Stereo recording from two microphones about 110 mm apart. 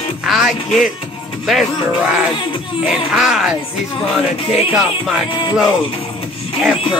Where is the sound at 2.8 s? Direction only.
5° right (ahead or behind).